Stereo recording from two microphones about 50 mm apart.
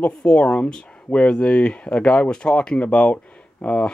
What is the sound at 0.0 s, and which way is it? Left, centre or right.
Speech, left.